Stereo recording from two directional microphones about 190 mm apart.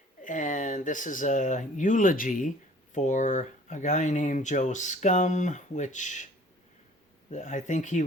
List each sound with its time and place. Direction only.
0.2 s speech: 40° left (ahead or behind)
7.3 s speech: 40° left (ahead or behind)